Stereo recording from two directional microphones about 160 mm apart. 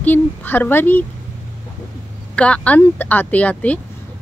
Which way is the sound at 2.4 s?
5° left (ahead or behind).